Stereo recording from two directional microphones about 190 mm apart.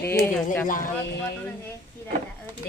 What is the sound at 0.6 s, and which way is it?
Speech, 45° left (ahead or behind).